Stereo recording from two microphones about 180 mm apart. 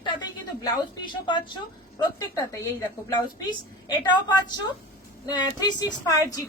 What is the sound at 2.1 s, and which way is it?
A woman's voice, 15° left (ahead or behind).